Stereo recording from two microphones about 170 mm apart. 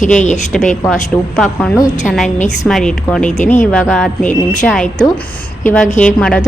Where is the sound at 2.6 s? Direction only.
5° left (ahead or behind).